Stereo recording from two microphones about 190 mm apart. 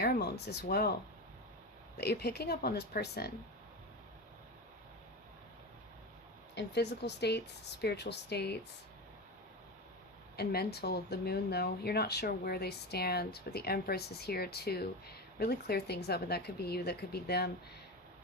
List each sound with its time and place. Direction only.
0.0 s speech: 55° left (ahead or behind)
2.0 s speech: 55° left (ahead or behind)
6.5 s speech: 65° left (ahead or behind)
10.3 s speech: 55° left (ahead or behind)